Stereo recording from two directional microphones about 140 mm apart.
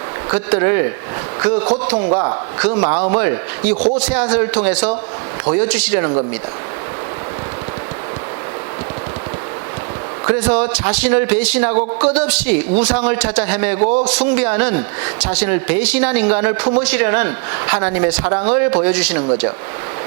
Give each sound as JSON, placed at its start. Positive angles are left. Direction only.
{"t": 0.3, "sound": "speech", "side_deg": -15}
{"t": 2.0, "sound": "a man's voice", "side_deg": -30}
{"t": 2.6, "sound": "speech", "side_deg": -15}
{"t": 10.2, "sound": "speech", "side_deg": -15}
{"t": 13.8, "sound": "a man's voice", "side_deg": -50}
{"t": 14.1, "sound": "speech", "side_deg": -10}